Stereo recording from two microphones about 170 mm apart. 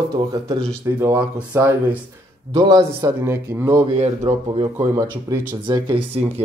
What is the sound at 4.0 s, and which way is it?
Speech, 35° right (ahead or behind).